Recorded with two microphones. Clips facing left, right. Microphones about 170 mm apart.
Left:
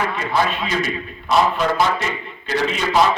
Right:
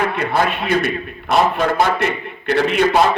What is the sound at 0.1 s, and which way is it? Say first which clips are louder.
A man's voice: right 2 dB; 60° right (ahead or behind).